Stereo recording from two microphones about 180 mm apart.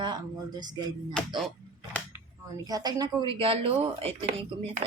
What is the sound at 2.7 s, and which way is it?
A woman's voice, 20° right (ahead or behind).